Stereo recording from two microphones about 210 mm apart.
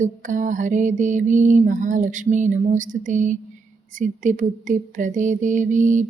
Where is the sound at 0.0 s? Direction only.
35° right (ahead or behind).